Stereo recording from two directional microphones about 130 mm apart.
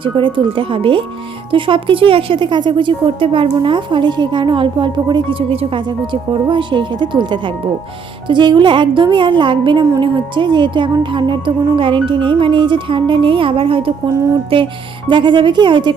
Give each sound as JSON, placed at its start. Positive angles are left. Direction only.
{"t": 0.0, "sound": "speech", "side_deg": -40}
{"t": 5.4, "sound": "speech", "side_deg": -50}